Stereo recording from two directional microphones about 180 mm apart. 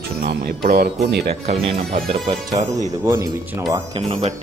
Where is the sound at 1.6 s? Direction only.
30° right (ahead or behind).